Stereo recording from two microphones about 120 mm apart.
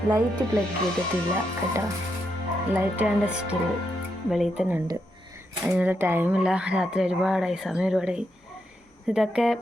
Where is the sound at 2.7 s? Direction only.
15° right (ahead or behind).